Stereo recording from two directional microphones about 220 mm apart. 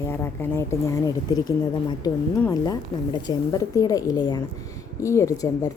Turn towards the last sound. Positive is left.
turn(degrees=15)  # may be behind; listen again after turning